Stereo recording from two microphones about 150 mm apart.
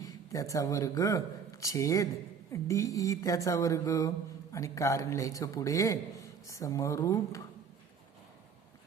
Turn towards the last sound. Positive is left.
turn(degrees=20)  # may be behind; listen again after turning